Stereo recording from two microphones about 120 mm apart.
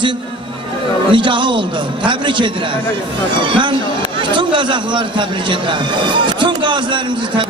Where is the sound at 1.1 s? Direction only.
45° right (ahead or behind).